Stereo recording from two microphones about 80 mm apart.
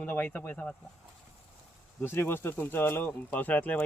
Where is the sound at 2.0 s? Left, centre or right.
Left.